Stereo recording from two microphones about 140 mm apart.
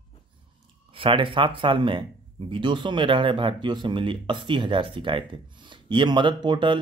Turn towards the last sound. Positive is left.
turn(degrees=-35)  # may be behind; listen again after turning